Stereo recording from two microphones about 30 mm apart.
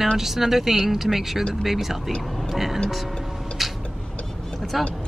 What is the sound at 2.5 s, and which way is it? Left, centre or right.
Speech, centre.